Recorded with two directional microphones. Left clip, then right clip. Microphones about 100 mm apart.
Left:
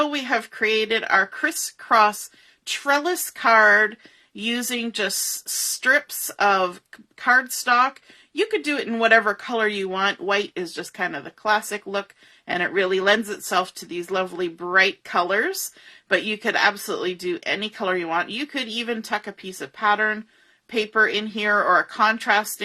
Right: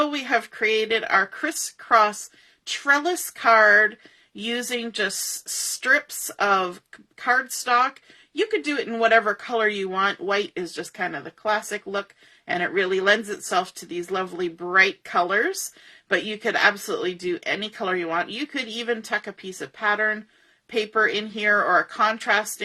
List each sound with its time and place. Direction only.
0.0 s speech: 35° left (ahead or behind)
8.4 s speech: 50° left (ahead or behind)